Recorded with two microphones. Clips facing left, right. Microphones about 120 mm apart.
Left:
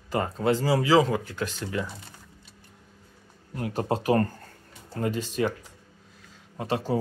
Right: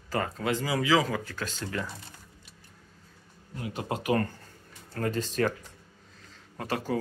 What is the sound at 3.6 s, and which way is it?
Speech, 40° left (ahead or behind).